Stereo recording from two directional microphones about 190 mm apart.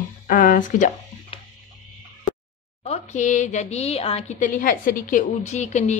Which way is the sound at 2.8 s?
35° left (ahead or behind).